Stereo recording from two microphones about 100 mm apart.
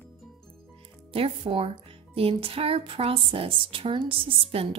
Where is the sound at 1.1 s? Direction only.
70° right (ahead or behind).